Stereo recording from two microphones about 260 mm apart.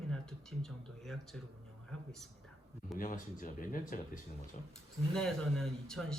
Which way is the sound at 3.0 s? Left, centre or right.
Left.